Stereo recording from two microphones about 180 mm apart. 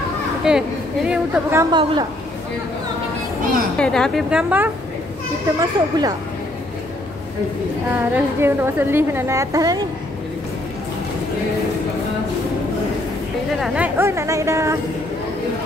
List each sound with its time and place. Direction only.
0.4 s a woman's voice: 5° right (ahead or behind)
1.6 s speech: 25° right (ahead or behind)
3.7 s a woman's voice: 5° left (ahead or behind)
5.6 s speech: 20° right (ahead or behind)
7.9 s a woman's voice: 15° right (ahead or behind)
13.6 s a woman's voice: 10° right (ahead or behind)